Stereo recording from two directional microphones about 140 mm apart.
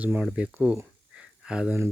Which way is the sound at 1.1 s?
5° right (ahead or behind).